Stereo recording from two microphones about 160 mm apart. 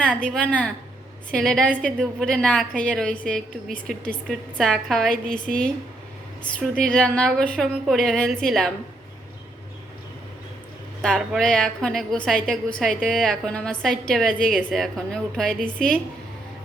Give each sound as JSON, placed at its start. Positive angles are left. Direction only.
{"t": 0.3, "sound": "a woman's voice", "side_deg": 5}
{"t": 11.0, "sound": "a woman's voice", "side_deg": 5}